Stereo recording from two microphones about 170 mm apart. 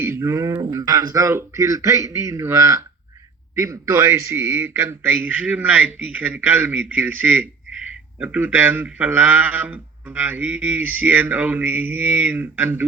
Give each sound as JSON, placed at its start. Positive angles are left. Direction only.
{"t": 0.0, "sound": "speech", "side_deg": -15}